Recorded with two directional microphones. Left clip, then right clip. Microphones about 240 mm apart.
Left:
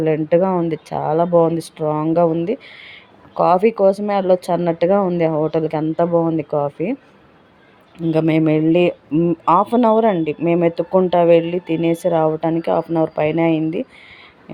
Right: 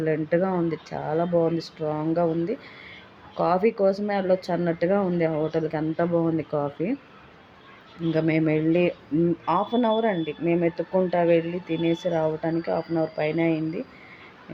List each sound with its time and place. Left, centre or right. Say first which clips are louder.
0.0 s speech: left 8 dB; left
8.1 s speech: left 7 dB; left